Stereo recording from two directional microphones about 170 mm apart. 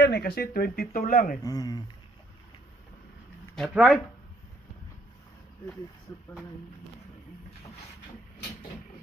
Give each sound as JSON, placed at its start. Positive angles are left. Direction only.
{"t": 0.0, "sound": "speech", "side_deg": 65}
{"t": 1.4, "sound": "speech", "side_deg": 20}
{"t": 3.5, "sound": "speech", "side_deg": 0}